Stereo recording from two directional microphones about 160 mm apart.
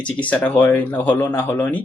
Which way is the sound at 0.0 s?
10° left (ahead or behind).